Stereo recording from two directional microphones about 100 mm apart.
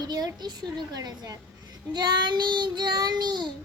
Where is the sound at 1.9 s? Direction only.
45° right (ahead or behind).